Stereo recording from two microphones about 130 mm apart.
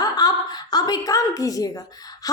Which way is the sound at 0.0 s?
30° left (ahead or behind).